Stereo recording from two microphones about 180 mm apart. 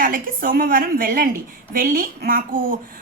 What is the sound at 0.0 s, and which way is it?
A woman's voice, 50° right (ahead or behind).